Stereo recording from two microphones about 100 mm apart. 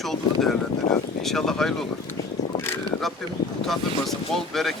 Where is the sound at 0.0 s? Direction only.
5° left (ahead or behind).